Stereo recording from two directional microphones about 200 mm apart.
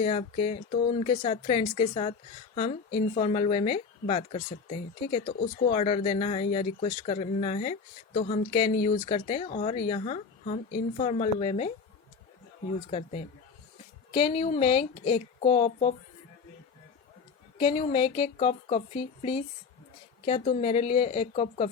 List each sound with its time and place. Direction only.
0.0 s a woman's voice: 30° left (ahead or behind)
12.9 s a woman's voice: 35° left (ahead or behind)
17.6 s a woman's voice: 25° left (ahead or behind)